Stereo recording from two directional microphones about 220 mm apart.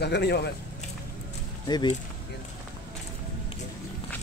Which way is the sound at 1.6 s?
20° left (ahead or behind).